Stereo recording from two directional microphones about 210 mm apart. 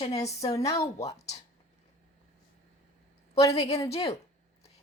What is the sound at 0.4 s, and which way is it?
Speech, 15° left (ahead or behind).